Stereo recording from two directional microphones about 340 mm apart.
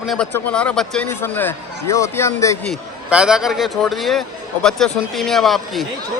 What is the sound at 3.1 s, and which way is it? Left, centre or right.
Speech, centre.